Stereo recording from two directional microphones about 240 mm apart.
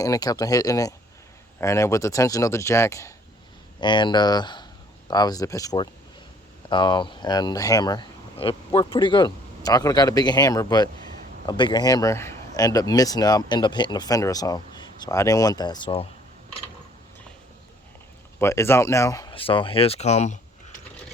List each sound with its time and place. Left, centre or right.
0.0 s speech: centre
18.3 s speech: centre; by 20.4 s left